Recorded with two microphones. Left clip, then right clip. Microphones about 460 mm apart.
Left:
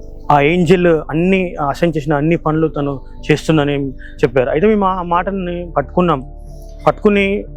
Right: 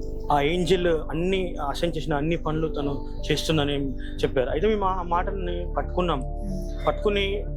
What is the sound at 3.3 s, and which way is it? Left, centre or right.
Speech, left.